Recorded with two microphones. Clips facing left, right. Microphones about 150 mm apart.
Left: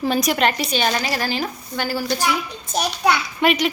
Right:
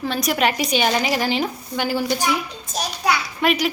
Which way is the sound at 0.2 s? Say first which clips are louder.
Left 1 dB; 5° right (ahead or behind).